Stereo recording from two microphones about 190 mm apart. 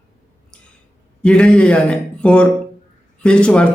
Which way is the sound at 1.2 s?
5° left (ahead or behind).